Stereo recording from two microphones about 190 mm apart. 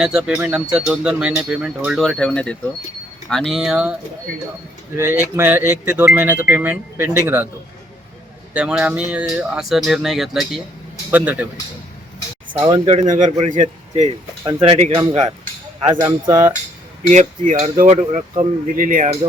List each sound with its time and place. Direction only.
0.0 s speech: 5° right (ahead or behind)
5.4 s speech: 10° right (ahead or behind)
8.5 s speech: 5° right (ahead or behind)
12.6 s speech: 25° right (ahead or behind)
13.1 s speech: 40° right (ahead or behind)
16.0 s speech: 20° right (ahead or behind)
17.1 s speech: 40° right (ahead or behind)